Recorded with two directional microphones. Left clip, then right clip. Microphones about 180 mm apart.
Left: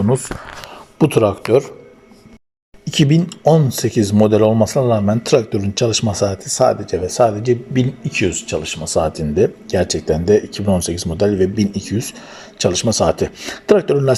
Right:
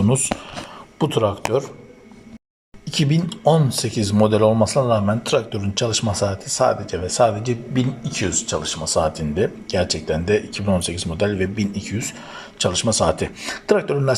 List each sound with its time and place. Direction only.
0.9 s speech: 15° left (ahead or behind)
2.8 s speech: 15° left (ahead or behind)